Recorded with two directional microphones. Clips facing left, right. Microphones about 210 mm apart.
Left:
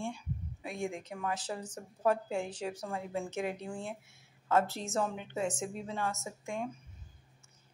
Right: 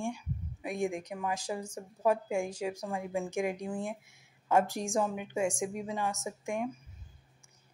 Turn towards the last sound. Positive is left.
turn(degrees=-15)  # may be behind; listen again after turning